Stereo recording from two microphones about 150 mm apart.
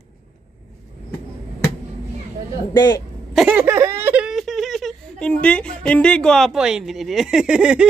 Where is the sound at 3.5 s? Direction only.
15° right (ahead or behind).